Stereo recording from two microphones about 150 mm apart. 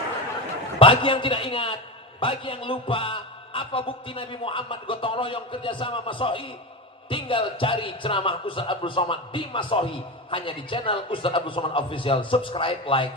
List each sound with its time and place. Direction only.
0.8 s a man's voice: 35° left (ahead or behind)